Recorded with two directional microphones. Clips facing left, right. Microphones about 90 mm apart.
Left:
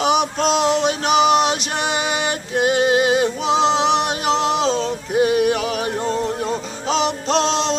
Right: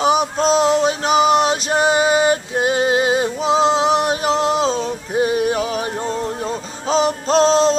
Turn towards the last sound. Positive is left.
turn(degrees=-35)  # may be behind; listen again after turning